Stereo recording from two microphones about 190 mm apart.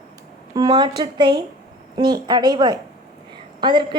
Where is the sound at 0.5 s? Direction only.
20° right (ahead or behind).